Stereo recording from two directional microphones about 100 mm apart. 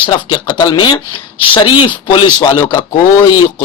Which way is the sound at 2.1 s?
55° left (ahead or behind).